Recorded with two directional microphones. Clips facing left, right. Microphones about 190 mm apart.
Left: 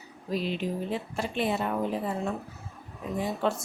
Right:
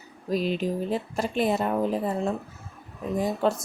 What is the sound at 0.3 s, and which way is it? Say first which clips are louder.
Speech: right 4 dB; 40° right (ahead or behind).